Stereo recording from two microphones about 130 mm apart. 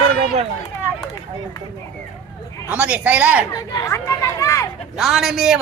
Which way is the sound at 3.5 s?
25° left (ahead or behind).